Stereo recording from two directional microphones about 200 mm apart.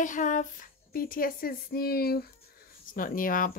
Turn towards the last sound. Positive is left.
turn(degrees=45)  # may be behind; listen again after turning